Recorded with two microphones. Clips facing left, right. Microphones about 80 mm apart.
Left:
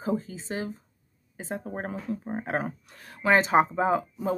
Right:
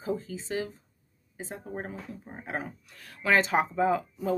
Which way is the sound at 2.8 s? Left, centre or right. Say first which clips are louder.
Left 1 dB; left.